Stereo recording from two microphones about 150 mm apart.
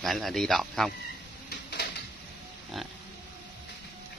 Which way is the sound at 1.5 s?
90° left.